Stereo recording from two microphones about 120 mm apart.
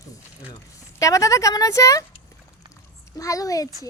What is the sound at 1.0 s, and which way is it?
Speech, 25° left (ahead or behind).